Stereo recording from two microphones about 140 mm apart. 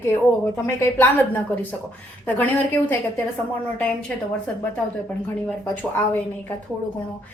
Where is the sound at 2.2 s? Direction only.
10° left (ahead or behind).